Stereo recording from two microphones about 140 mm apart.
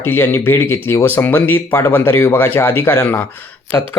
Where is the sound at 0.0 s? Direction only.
15° left (ahead or behind).